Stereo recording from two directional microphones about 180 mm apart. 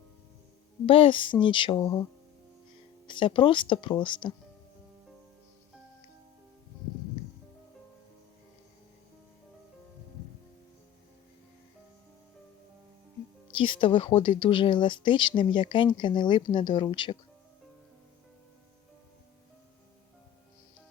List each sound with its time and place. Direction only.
0.9 s speech: 30° left (ahead or behind)
3.1 s speech: 25° left (ahead or behind)
13.6 s speech: 30° left (ahead or behind)